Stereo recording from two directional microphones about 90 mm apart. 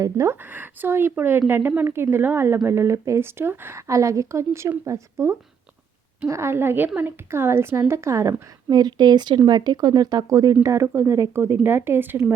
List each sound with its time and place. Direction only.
0.0 s speech: 35° right (ahead or behind)
0.5 s a woman's voice: 20° right (ahead or behind); by 8.8 s 35° right (ahead or behind)
8.8 s speech: 55° right (ahead or behind); by 12.3 s 25° right (ahead or behind)